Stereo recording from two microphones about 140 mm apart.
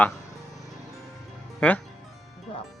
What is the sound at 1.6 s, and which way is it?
Music, 10° left (ahead or behind).